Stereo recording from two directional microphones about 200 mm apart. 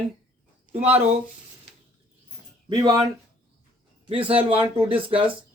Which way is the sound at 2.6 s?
20° right (ahead or behind).